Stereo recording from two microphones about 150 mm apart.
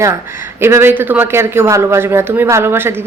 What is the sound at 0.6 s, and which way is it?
A woman's voice, 15° right (ahead or behind).